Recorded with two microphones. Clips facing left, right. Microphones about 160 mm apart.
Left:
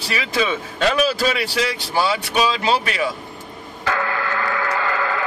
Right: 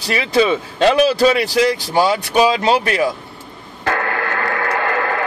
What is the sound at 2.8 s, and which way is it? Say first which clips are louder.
Speech: right 5 dB; 45° right (ahead or behind).